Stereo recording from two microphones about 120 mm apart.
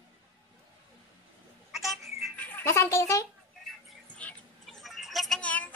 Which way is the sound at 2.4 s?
15° left (ahead or behind).